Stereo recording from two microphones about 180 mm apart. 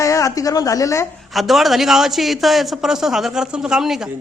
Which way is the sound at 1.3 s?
Centre (ahead or behind).